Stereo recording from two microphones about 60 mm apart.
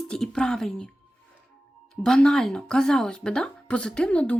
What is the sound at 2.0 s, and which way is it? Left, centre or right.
A woman's voice, centre.